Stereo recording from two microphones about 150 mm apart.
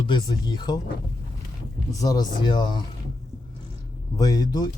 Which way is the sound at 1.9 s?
25° left (ahead or behind).